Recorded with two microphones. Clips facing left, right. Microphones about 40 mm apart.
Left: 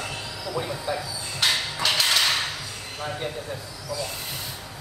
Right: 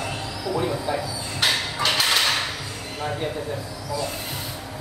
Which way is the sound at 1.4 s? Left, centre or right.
Centre.